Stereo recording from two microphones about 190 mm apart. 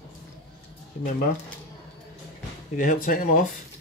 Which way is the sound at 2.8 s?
45° left (ahead or behind).